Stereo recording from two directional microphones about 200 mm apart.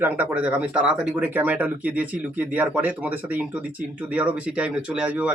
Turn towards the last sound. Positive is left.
turn(degrees=-5)  # may be behind; listen again after turning